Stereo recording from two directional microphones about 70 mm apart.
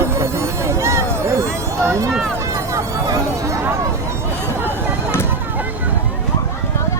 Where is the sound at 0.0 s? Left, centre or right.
Right.